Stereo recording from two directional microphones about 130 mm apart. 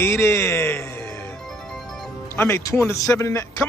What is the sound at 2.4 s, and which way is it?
A man's voice, 20° left (ahead or behind).